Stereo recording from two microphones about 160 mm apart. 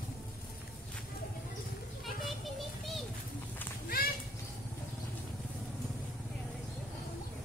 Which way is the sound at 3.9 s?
70° left (ahead or behind).